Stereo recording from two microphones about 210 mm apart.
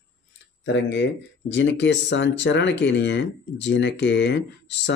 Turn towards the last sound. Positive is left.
turn(degrees=55)  # may be behind; listen again after turning